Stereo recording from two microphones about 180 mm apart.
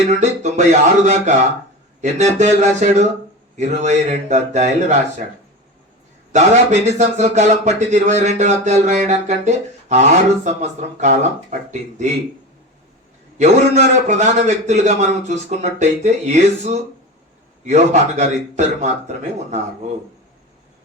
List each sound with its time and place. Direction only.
0.2 s a man's voice: 40° right (ahead or behind)
6.3 s a man's voice: 40° right (ahead or behind)
13.4 s a man's voice: 40° right (ahead or behind)